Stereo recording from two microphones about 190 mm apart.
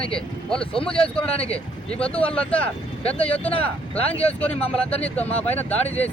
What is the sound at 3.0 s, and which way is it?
Speech, 30° left (ahead or behind).